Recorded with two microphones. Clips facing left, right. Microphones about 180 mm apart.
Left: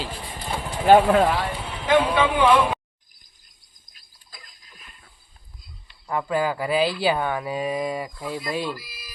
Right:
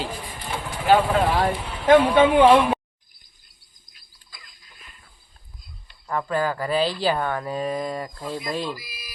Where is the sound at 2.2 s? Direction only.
30° right (ahead or behind).